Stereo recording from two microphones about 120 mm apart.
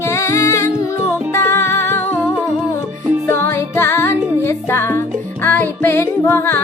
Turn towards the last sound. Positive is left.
turn(degrees=20)  # may be behind; listen again after turning